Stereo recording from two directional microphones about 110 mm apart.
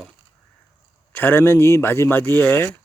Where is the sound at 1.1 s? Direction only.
15° left (ahead or behind).